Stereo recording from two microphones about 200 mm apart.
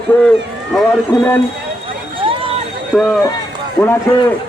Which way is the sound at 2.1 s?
25° right (ahead or behind).